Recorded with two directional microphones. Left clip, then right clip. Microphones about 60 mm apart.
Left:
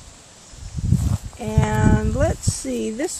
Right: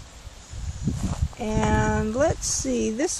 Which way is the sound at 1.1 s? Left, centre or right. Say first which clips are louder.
Left 1 dB; centre.